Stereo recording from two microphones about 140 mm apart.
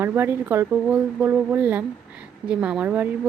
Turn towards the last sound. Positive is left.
turn(degrees=-10)  # may be behind; listen again after turning